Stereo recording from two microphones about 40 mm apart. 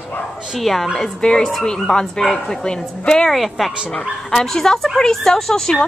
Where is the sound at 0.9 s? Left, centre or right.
Centre.